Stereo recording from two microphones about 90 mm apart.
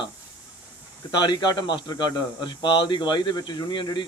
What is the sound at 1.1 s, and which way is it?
A man's voice, 55° left (ahead or behind).